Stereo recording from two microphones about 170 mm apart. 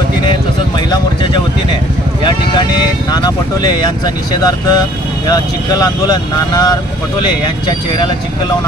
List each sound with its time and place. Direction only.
2.2 s vehicle: 25° left (ahead or behind)
4.0 s speech: 20° left (ahead or behind)